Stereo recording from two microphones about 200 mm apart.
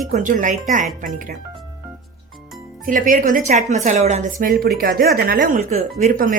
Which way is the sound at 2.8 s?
45° right (ahead or behind).